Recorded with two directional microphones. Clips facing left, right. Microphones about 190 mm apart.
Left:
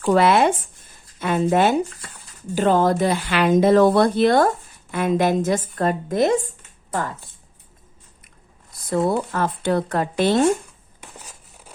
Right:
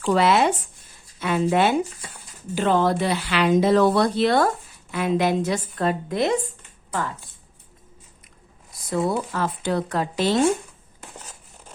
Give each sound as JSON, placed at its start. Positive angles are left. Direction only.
{"t": 0.0, "sound": "a woman's voice", "side_deg": 50}
{"t": 8.9, "sound": "a woman's voice", "side_deg": 55}
{"t": 11.0, "sound": "crushing", "side_deg": 10}